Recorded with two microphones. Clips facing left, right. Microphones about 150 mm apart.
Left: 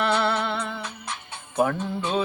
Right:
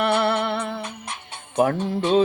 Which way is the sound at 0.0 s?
60° right (ahead or behind).